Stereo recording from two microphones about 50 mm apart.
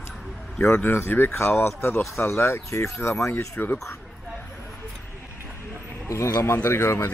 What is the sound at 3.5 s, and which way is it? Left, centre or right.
Speech, left.